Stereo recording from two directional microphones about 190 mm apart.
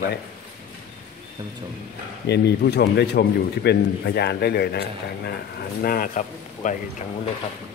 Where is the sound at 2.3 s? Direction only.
60° left (ahead or behind); by 6.7 s 45° left (ahead or behind).